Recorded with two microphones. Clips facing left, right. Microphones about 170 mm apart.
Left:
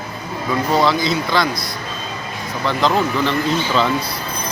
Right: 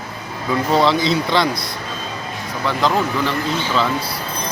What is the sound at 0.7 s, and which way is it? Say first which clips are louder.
Speech: right 1 dB; 25° right (ahead or behind).